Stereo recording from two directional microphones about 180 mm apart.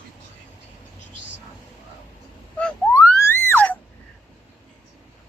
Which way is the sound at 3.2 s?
10° left (ahead or behind).